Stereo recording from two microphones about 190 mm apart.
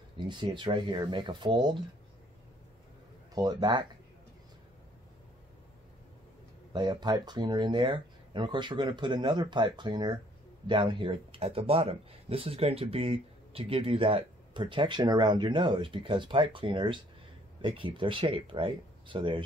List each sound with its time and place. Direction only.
0.3 s speech: 25° right (ahead or behind)
3.3 s speech: 20° right (ahead or behind)
6.7 s speech: 20° right (ahead or behind)